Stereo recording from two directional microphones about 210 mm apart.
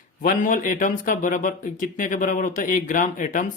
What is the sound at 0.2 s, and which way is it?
Speech, 40° left (ahead or behind).